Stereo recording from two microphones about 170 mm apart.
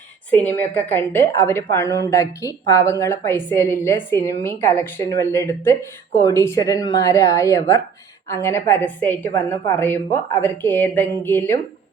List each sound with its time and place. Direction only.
0.3 s a woman's voice: 10° left (ahead or behind)